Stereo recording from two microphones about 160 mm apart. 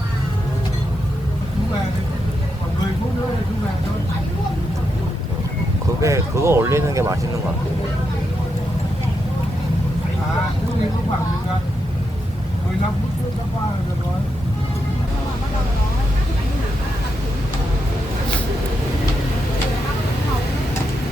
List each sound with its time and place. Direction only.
6.0 s speech: 20° right (ahead or behind)